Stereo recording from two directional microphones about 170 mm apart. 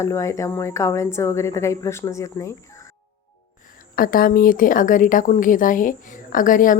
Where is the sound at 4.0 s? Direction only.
55° left (ahead or behind).